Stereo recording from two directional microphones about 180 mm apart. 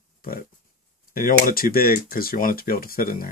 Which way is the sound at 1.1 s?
50° left (ahead or behind).